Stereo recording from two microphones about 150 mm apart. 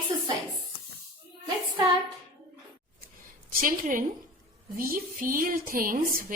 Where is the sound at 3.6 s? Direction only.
65° right (ahead or behind).